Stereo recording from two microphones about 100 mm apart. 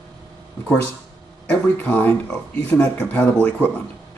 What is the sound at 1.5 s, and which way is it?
Speech, 15° left (ahead or behind).